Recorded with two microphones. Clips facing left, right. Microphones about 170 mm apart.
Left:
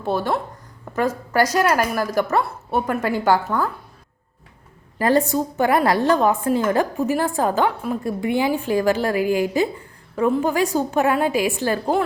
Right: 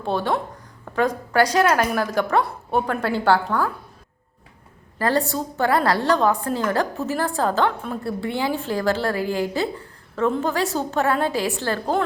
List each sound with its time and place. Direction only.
0.0 s a woman's voice: 10° left (ahead or behind)
4.9 s a woman's voice: 15° left (ahead or behind)